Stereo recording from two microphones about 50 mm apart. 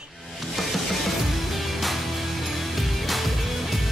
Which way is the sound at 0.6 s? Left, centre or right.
Centre.